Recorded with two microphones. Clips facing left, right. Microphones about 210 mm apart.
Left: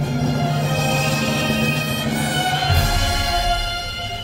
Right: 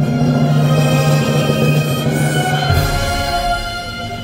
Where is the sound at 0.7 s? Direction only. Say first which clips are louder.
Right 7 dB; 60° right (ahead or behind).